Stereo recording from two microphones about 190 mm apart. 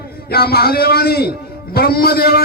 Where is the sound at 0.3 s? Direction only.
55° left (ahead or behind).